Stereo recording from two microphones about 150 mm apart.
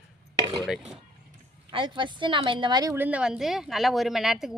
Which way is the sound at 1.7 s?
30° right (ahead or behind).